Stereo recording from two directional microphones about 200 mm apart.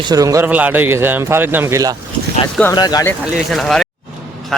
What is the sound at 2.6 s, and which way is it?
Speech, 15° left (ahead or behind).